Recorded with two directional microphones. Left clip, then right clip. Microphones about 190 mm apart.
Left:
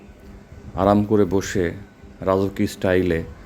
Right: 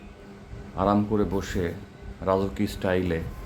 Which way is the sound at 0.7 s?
35° left (ahead or behind).